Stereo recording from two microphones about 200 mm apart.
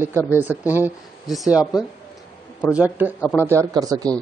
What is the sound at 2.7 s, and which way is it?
Speech, 10° right (ahead or behind).